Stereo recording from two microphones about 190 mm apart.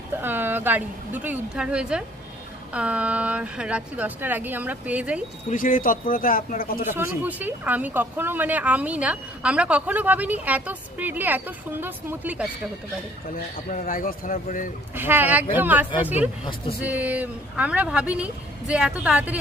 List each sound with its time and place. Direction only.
0.2 s a woman's voice: 10° right (ahead or behind)
5.5 s speech: 45° left (ahead or behind)
6.9 s speech: 10° right (ahead or behind)
13.3 s speech: 45° left (ahead or behind)
14.9 s speech: 10° right (ahead or behind)